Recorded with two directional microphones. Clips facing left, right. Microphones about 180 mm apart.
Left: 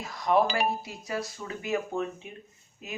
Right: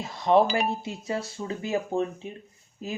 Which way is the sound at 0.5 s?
25° right (ahead or behind).